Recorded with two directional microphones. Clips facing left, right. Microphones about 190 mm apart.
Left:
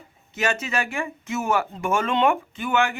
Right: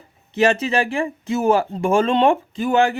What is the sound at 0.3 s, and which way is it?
Speech, 35° right (ahead or behind).